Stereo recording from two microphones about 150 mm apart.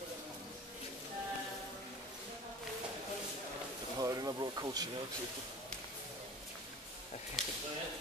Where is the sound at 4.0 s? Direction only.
25° right (ahead or behind).